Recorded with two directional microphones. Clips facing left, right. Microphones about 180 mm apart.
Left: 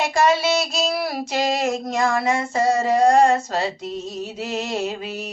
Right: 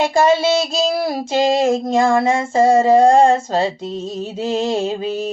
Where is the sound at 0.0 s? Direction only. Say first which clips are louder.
Right 4 dB; 30° right (ahead or behind).